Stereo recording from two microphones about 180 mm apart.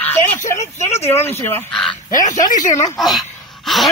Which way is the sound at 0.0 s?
10° left (ahead or behind).